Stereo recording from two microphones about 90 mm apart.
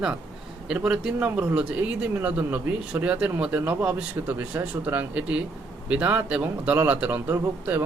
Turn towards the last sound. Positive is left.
turn(degrees=-20)  # may be behind; listen again after turning